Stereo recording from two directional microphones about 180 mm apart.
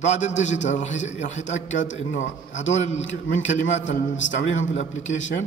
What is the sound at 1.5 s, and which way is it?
Speech, 90° left.